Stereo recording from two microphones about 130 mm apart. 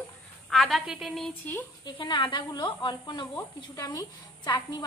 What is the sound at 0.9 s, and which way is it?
Speech, centre (ahead or behind).